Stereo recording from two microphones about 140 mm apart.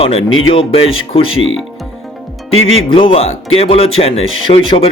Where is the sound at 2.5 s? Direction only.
45° left (ahead or behind).